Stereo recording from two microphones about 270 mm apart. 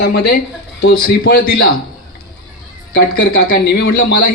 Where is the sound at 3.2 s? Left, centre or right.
Left.